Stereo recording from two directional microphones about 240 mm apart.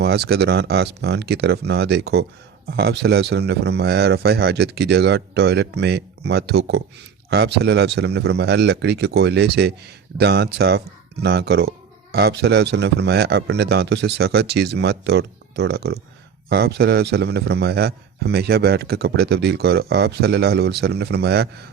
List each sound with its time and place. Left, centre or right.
0.0 s a man's voice: right